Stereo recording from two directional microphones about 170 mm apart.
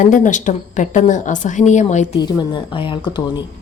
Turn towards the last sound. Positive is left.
turn(degrees=25)  # may be behind; listen again after turning